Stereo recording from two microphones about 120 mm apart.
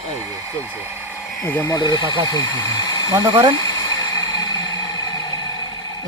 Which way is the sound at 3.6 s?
35° left (ahead or behind).